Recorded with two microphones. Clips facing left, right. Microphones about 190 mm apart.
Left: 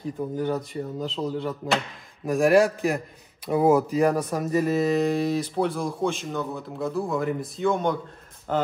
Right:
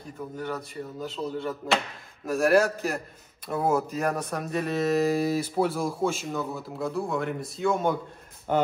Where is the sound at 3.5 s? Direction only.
10° left (ahead or behind).